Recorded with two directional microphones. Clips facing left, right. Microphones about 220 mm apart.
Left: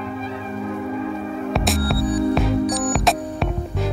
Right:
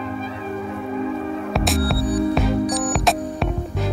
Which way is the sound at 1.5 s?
Centre (ahead or behind).